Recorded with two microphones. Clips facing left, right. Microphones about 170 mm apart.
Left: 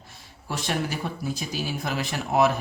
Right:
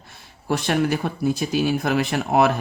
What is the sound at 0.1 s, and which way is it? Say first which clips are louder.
Speech: right 9 dB; 65° right (ahead or behind).